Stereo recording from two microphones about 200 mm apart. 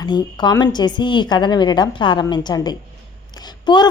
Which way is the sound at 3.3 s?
20° left (ahead or behind).